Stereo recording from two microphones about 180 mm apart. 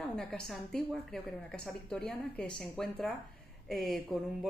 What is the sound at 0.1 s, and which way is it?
A woman's voice, 5° left (ahead or behind).